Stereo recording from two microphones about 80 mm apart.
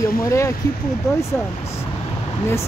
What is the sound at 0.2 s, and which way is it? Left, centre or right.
Speech, left.